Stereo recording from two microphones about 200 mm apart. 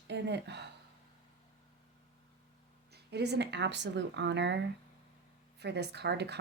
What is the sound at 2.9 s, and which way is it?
Speech, 55° right (ahead or behind).